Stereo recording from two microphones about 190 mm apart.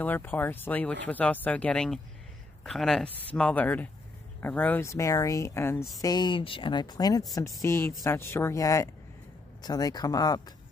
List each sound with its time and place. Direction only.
0.0 s speech: 10° left (ahead or behind)